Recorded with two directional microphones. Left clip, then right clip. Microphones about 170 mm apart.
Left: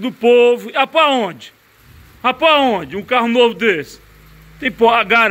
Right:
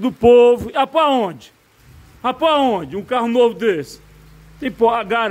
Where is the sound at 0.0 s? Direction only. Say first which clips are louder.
Right 1 dB; 35° right (ahead or behind).